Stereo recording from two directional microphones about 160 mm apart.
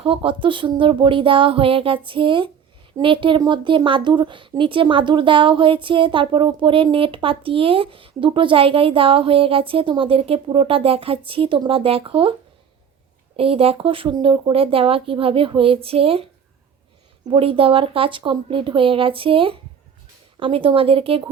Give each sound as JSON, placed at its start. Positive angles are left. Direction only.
{"t": 0.0, "sound": "speech", "side_deg": -35}
{"t": 13.3, "sound": "speech", "side_deg": -35}